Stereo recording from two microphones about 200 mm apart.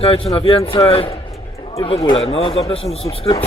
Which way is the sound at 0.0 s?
30° left (ahead or behind).